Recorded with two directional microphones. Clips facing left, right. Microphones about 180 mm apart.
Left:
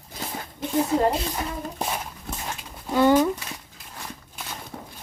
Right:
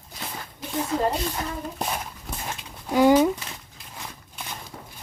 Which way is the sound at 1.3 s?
5° left (ahead or behind).